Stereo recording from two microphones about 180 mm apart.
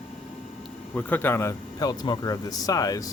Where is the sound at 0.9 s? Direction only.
10° left (ahead or behind).